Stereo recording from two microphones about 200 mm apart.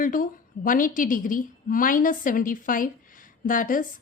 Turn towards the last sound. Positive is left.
turn(degrees=40)  # may be behind; listen again after turning